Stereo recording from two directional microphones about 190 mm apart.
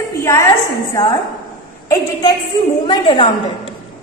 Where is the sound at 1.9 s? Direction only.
20° left (ahead or behind).